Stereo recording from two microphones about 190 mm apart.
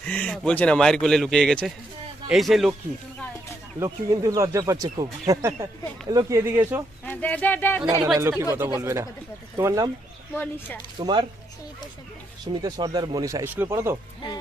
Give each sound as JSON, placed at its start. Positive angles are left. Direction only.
{"t": 0.0, "sound": "speech", "side_deg": 5}
{"t": 3.8, "sound": "speech", "side_deg": -20}
{"t": 7.0, "sound": "speech", "side_deg": 10}
{"t": 8.2, "sound": "speech", "side_deg": -15}
{"t": 10.3, "sound": "speech", "side_deg": 10}
{"t": 10.9, "sound": "speech", "side_deg": -25}
{"t": 12.6, "sound": "speech", "side_deg": -20}